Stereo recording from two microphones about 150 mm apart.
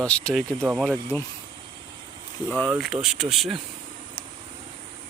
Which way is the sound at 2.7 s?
Centre (ahead or behind).